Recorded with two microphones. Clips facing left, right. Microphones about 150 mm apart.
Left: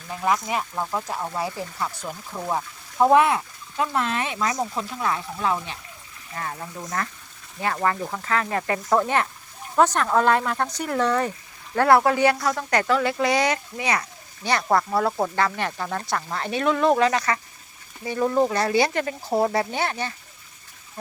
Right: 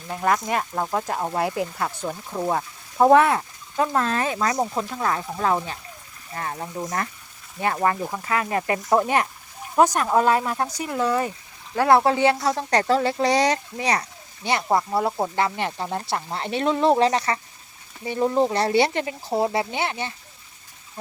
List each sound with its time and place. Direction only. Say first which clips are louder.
0.9 s speech: right 4 dB; 50° right (ahead or behind)
1.5 s speech: right 4 dB; 60° right (ahead or behind)
2.0 s speech: right 4 dB; 20° right (ahead or behind)
3.2 s speech: right 1 dB; 40° right (ahead or behind)
5.0 s speech: right 1 dB; 40° right (ahead or behind); by 7.9 s 25° right (ahead or behind)
8.0 s speech: even; 10° right (ahead or behind)
11.9 s speech: even; 25° right (ahead or behind)
14.4 s speech: even; 20° right (ahead or behind)